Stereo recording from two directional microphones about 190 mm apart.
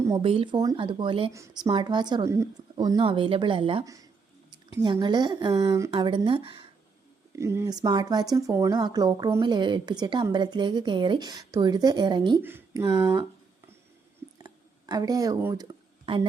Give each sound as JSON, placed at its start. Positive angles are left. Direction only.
{"t": 0.2, "sound": "speech", "side_deg": -30}
{"t": 7.3, "sound": "speech", "side_deg": -15}
{"t": 12.4, "sound": "speech", "side_deg": -10}
{"t": 14.4, "sound": "a sound", "side_deg": -20}